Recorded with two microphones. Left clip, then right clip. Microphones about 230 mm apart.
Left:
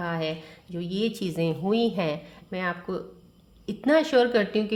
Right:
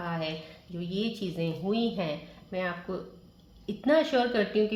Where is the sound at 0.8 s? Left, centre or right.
Left.